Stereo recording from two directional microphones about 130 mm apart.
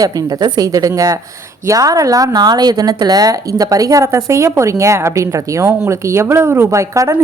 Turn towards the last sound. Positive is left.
turn(degrees=-25)  # may be behind; listen again after turning